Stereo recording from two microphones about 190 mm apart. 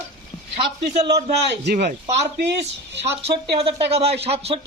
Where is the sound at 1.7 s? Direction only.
55° right (ahead or behind).